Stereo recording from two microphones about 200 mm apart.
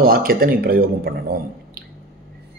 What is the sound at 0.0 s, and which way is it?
A man's voice, 45° right (ahead or behind).